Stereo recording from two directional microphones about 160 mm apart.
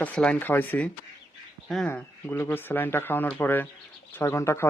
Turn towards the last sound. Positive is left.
turn(degrees=15)  # may be behind; listen again after turning